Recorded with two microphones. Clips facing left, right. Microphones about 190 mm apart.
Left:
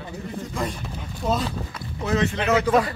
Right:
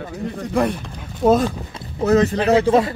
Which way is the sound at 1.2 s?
50° right (ahead or behind).